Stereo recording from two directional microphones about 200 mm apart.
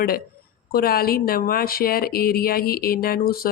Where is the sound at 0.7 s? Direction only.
50° left (ahead or behind).